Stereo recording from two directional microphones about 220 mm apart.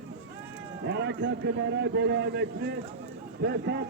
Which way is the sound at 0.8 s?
50° right (ahead or behind).